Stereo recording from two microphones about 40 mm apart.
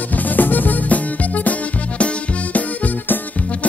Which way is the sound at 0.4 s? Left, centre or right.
Left.